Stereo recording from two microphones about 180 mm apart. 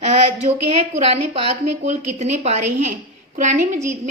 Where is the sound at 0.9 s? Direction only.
35° right (ahead or behind).